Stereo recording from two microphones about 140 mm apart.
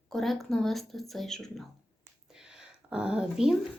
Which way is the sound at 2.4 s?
5° right (ahead or behind).